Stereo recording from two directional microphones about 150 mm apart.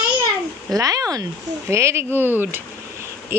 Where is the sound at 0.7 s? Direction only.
25° right (ahead or behind).